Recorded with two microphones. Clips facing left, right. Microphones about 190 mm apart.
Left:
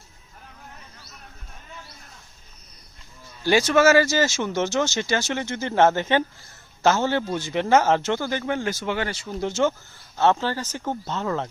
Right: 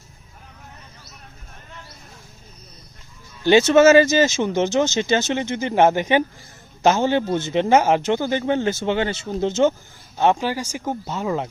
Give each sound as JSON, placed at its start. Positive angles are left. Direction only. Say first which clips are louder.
{"t": 3.4, "sound": "a man's voice", "louder": "right 5 dB", "side_deg": -25}